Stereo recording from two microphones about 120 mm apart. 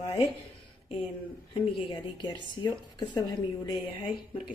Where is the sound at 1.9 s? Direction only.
40° left (ahead or behind).